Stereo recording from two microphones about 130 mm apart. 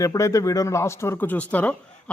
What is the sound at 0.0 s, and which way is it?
Speech, 25° left (ahead or behind).